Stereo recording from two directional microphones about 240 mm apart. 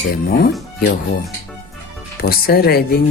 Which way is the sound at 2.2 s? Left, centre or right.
Left.